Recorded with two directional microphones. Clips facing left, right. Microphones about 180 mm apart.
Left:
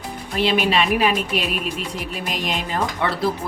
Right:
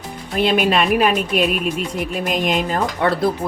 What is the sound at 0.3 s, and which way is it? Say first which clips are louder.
Speech: right 3 dB; 50° right (ahead or behind).